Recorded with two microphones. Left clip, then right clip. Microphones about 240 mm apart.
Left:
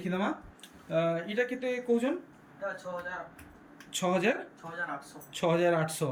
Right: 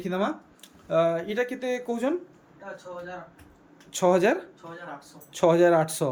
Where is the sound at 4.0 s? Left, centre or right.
Centre.